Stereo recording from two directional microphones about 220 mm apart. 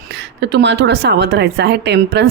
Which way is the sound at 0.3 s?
50° right (ahead or behind).